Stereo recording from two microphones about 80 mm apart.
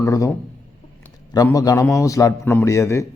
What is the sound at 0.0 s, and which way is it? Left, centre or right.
Speech, left.